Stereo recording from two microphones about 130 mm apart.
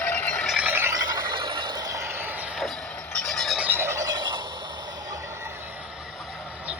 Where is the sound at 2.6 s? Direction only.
5° left (ahead or behind).